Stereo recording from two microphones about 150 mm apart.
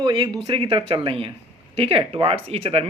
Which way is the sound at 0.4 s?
35° right (ahead or behind).